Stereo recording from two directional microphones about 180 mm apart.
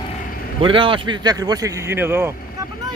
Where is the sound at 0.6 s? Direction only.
30° right (ahead or behind); by 2.3 s 15° right (ahead or behind).